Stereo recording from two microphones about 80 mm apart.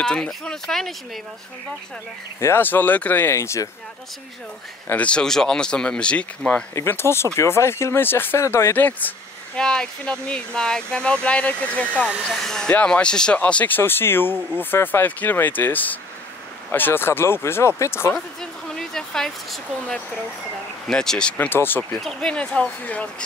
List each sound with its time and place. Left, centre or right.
0.0 s speech: centre
2.4 s speech: left
3.3 s speech: left
4.9 s speech: centre
6.7 s speech: left
8.7 s speech: left
9.6 s speech: centre
12.3 s speech: centre; by 18.1 s left
18.1 s speech: centre
21.4 s speech: left
22.0 s speech: centre